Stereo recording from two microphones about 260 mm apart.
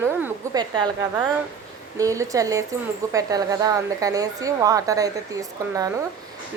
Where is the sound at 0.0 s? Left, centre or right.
Centre.